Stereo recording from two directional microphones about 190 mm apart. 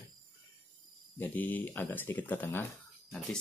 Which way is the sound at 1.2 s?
10° left (ahead or behind).